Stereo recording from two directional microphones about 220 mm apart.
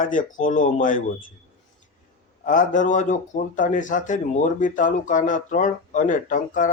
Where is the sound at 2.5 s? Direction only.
35° left (ahead or behind).